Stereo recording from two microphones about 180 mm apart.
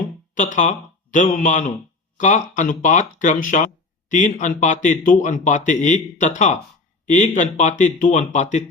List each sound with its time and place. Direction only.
0.3 s a man's voice: 45° left (ahead or behind)